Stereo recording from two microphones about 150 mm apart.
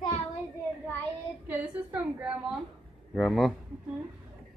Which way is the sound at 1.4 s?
10° right (ahead or behind).